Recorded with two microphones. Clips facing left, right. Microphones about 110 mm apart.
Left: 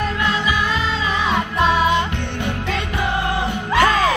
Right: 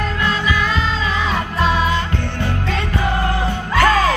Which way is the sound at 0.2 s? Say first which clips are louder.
Right 3 dB; 20° left (ahead or behind).